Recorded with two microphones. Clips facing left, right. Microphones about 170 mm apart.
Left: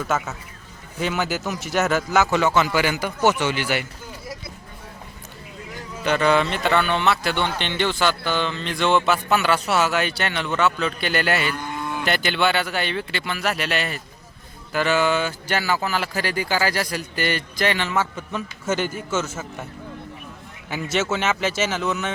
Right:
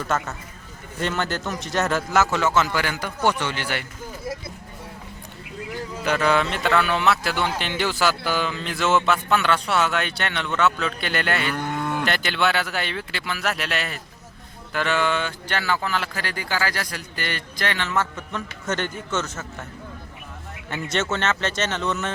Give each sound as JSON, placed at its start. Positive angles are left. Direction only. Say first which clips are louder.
{"t": 0.0, "sound": "speech", "louder": "left 1 dB", "side_deg": 5}
{"t": 6.1, "sound": "speech", "louder": "left 2 dB", "side_deg": 0}
{"t": 11.4, "sound": "cattle", "louder": "right 2 dB", "side_deg": -60}
{"t": 12.0, "sound": "a man's voice", "louder": "left 5 dB", "side_deg": 0}
{"t": 20.7, "sound": "speech", "louder": "left 2 dB", "side_deg": 5}